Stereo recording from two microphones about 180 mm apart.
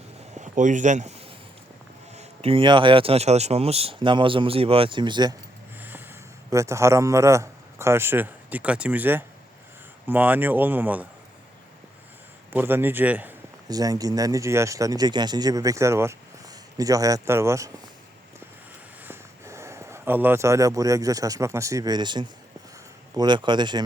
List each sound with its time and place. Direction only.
0.3 s a man's voice: 45° right (ahead or behind); by 5.3 s 25° right (ahead or behind)
5.8 s a man's voice: 10° right (ahead or behind)
12.5 s speech: 10° right (ahead or behind)
13.7 s speech: 20° right (ahead or behind)
19.0 s speech: 15° right (ahead or behind)